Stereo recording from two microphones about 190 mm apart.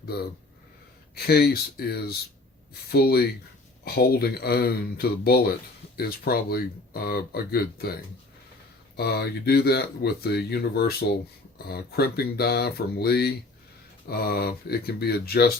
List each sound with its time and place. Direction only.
1.1 s speech: 55° left (ahead or behind)
9.0 s speech: 55° left (ahead or behind)